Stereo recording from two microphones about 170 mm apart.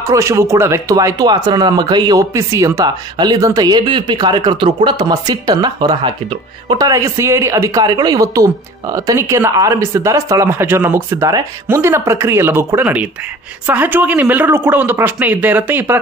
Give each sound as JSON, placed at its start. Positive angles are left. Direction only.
{"t": 0.0, "sound": "speech", "side_deg": -20}